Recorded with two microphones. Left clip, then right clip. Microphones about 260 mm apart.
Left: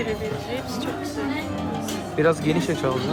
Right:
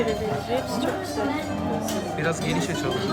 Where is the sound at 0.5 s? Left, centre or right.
Centre.